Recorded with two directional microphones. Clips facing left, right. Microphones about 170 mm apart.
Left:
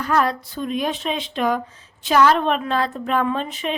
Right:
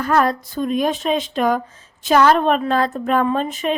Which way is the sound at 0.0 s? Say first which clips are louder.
Right 3 dB; 45° right (ahead or behind).